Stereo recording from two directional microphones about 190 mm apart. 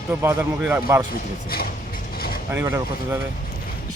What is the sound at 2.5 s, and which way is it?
Speech, 10° right (ahead or behind).